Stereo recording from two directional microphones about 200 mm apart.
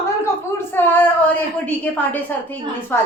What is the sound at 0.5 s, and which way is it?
A woman's voice, 10° left (ahead or behind).